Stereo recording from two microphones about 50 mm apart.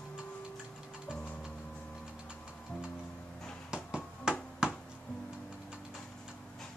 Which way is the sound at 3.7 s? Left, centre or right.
Centre.